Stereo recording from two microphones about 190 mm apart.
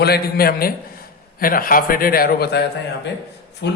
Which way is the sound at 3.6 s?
65° left (ahead or behind).